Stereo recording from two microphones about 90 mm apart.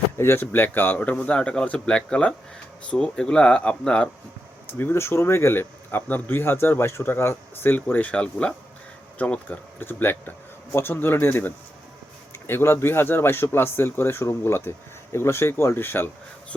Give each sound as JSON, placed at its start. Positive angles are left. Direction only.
{"t": 0.2, "sound": "speech", "side_deg": 25}
{"t": 4.8, "sound": "speech", "side_deg": 25}